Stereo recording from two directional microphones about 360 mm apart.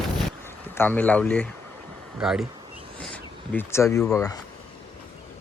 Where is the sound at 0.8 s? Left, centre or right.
Centre.